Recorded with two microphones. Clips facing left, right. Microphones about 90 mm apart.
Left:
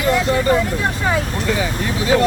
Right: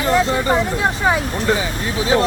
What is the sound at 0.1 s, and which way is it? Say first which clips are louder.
Speech: even; 30° right (ahead or behind).